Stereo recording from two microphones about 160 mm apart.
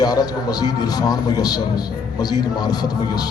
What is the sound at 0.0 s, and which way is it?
A man's voice, 25° left (ahead or behind).